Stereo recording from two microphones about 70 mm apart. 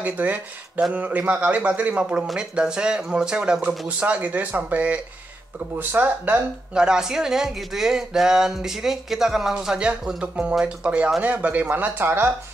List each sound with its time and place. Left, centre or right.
0.0 s a man's voice: right
6.7 s a man's voice: centre; by 12.3 s right